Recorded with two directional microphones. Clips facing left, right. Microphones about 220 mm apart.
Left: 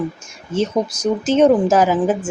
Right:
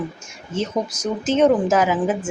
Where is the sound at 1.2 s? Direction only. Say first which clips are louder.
Left 3 dB; 30° left (ahead or behind).